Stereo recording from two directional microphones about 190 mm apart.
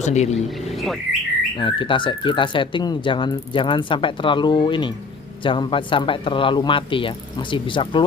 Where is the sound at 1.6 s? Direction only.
25° left (ahead or behind).